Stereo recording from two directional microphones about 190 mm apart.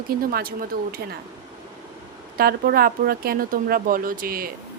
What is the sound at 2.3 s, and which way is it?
Speech, 50° right (ahead or behind).